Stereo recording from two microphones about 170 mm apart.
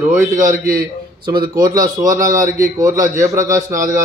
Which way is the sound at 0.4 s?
55° right (ahead or behind).